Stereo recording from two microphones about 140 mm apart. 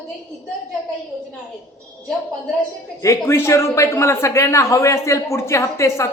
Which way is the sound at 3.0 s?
20° left (ahead or behind).